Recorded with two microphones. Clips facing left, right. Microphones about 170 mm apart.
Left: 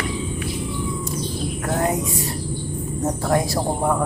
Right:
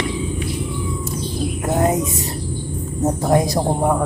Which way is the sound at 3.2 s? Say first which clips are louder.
Right 4 dB; 20° right (ahead or behind).